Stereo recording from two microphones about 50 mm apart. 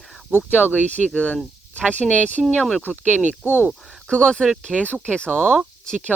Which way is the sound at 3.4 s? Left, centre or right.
Left.